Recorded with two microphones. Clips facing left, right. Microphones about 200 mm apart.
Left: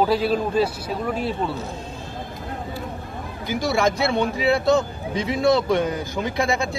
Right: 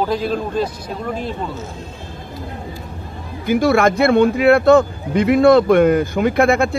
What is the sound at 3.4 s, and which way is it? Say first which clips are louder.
A man's voice: right 7 dB; 55° right (ahead or behind).